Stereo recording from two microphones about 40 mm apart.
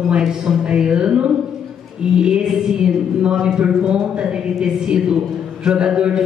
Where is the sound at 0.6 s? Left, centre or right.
Right.